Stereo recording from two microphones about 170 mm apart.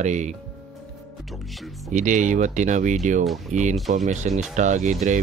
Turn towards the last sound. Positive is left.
turn(degrees=-45)  # may be behind; listen again after turning